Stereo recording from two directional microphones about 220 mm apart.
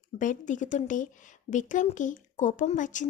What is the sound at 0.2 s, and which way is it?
Speech, 35° left (ahead or behind).